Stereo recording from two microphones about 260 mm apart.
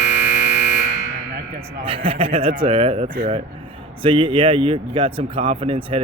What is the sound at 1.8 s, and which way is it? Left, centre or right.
Speech, right.